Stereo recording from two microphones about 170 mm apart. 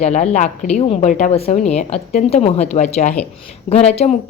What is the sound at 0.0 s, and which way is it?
Speech, 40° left (ahead or behind).